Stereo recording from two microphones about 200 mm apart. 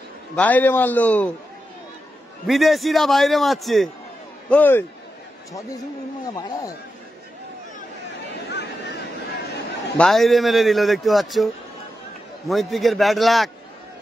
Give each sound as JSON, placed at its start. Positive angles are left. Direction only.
{"t": 0.4, "sound": "a man's voice", "side_deg": 10}
{"t": 2.4, "sound": "a man's voice", "side_deg": 0}
{"t": 6.2, "sound": "speech", "side_deg": 20}
{"t": 8.5, "sound": "vehicle", "side_deg": 55}
{"t": 9.9, "sound": "a man's voice", "side_deg": 0}